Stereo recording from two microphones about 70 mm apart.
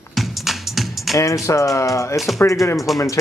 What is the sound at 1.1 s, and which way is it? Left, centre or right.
Speech, left.